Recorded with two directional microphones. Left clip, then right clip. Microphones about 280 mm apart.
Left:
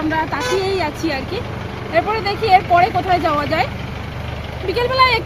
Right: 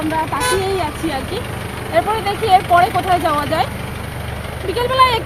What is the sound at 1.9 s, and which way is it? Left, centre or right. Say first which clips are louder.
Speech: right 1 dB; centre.